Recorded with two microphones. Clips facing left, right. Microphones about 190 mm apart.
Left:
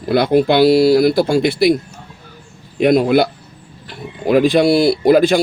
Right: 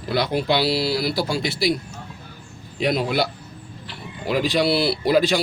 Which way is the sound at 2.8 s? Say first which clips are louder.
Left 9 dB; 55° left (ahead or behind).